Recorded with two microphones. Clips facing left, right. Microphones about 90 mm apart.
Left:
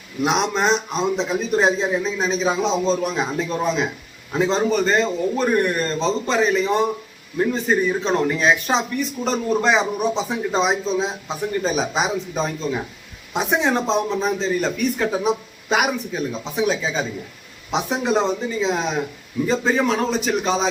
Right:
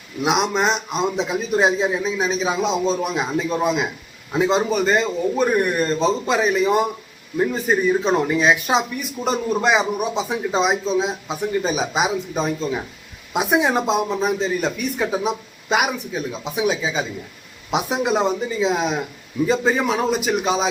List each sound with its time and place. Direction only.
0.2 s speech: 5° right (ahead or behind)